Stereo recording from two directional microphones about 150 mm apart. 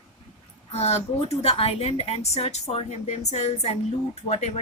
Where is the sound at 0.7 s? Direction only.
45° left (ahead or behind).